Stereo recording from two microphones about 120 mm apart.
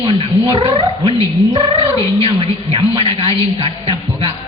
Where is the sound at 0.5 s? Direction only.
45° right (ahead or behind).